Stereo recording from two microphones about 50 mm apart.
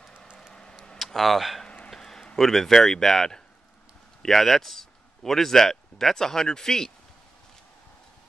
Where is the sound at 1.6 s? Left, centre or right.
Left.